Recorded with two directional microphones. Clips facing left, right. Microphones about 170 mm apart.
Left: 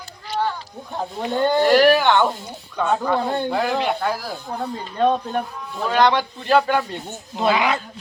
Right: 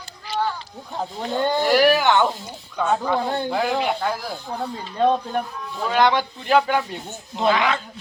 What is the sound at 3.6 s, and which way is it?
Speech, 10° right (ahead or behind).